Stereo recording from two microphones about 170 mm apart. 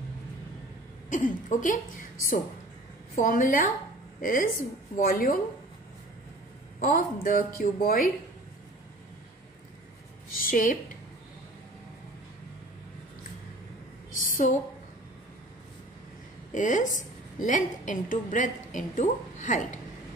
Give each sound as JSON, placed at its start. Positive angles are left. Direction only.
{"t": 1.1, "sound": "a woman's voice", "side_deg": 50}
{"t": 3.2, "sound": "a woman's voice", "side_deg": 55}
{"t": 6.8, "sound": "a woman's voice", "side_deg": 55}
{"t": 10.3, "sound": "a woman's voice", "side_deg": 55}
{"t": 14.1, "sound": "a sound", "side_deg": 50}
{"t": 16.5, "sound": "a woman's voice", "side_deg": 50}